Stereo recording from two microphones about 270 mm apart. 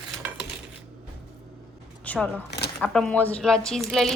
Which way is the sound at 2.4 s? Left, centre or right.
Left.